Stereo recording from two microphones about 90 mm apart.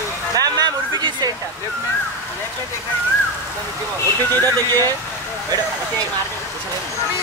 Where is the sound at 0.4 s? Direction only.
55° right (ahead or behind).